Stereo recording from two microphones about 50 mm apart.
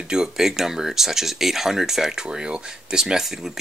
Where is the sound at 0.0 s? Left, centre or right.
Centre.